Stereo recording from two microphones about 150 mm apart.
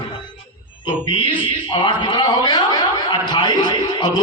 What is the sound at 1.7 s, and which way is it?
A man's voice, 30° left (ahead or behind).